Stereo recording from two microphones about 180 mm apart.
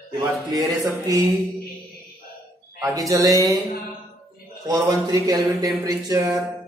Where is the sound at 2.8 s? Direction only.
20° right (ahead or behind).